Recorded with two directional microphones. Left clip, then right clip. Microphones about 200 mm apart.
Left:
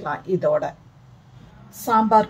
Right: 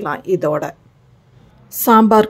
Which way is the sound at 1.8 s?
40° right (ahead or behind).